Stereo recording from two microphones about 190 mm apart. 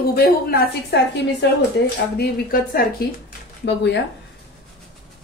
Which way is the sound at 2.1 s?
50° left (ahead or behind).